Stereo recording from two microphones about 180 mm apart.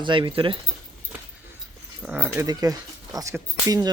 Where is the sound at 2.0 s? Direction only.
10° right (ahead or behind).